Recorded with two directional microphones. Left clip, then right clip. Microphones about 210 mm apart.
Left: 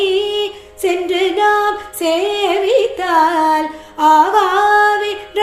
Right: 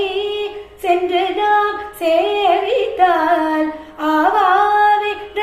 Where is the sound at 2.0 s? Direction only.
55° left (ahead or behind).